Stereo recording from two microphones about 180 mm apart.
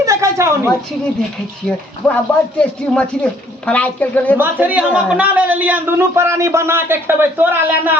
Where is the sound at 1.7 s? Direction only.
5° left (ahead or behind).